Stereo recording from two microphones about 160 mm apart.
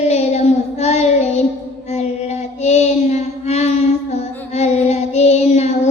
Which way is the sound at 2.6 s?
45° left (ahead or behind).